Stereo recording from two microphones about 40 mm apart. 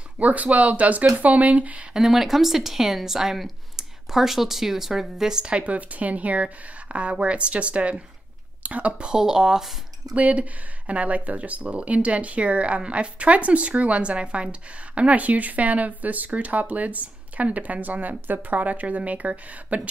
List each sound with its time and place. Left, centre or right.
0.2 s speech: right
2.0 s speech: centre
5.4 s a woman's voice: right
9.0 s speech: centre
10.1 s speech: right